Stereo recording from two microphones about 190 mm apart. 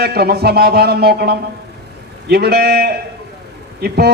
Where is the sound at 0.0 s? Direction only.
55° right (ahead or behind).